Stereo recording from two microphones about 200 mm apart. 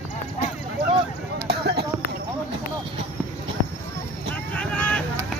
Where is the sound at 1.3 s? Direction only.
50° right (ahead or behind).